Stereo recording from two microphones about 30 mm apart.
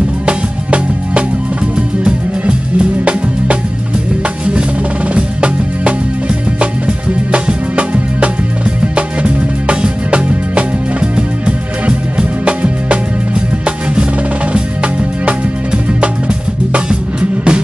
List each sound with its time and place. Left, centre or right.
0.3 s music: right
1.8 s music: right
5.1 s music: right